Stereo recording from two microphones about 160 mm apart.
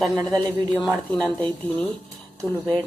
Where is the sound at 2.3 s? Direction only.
20° right (ahead or behind).